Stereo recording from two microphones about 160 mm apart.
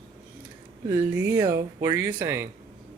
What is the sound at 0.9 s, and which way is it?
Speech, 15° right (ahead or behind).